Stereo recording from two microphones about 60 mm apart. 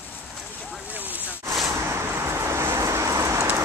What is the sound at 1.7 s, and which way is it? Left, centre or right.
Vehicle, right.